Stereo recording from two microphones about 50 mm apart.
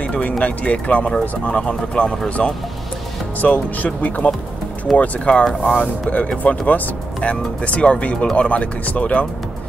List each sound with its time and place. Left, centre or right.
0.0 s music: left
0.4 s speech: left
3.3 s speech: left